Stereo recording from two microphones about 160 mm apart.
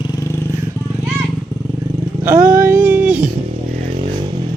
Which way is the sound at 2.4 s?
60° right (ahead or behind).